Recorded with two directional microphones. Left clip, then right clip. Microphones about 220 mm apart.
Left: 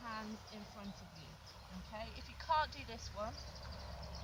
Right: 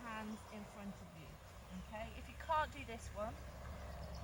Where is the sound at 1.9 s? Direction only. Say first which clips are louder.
Left 1 dB; centre (ahead or behind).